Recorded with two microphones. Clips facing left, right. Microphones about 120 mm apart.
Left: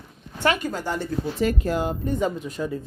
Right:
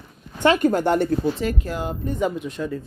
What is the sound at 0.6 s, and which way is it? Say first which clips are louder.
Speech: right 9 dB; 60° right (ahead or behind).